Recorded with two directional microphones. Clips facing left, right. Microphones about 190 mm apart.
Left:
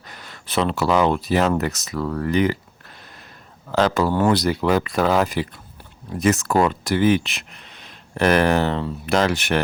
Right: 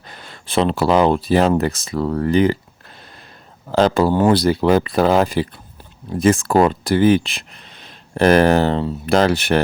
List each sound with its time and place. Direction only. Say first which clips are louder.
0.1 s speech: right 5 dB; 30° right (ahead or behind)
3.7 s speech: right 4 dB; 30° right (ahead or behind)